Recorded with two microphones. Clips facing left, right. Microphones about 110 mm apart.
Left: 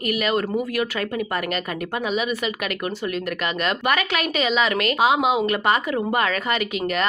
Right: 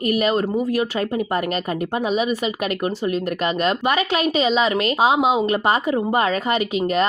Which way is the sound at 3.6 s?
25° right (ahead or behind).